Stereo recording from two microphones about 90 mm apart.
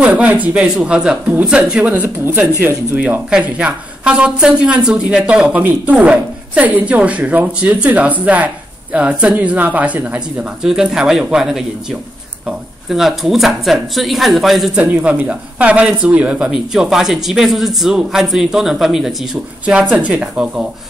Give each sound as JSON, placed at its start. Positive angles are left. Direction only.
{"t": 0.0, "sound": "a woman's voice", "side_deg": -15}
{"t": 14.8, "sound": "a woman's voice", "side_deg": -15}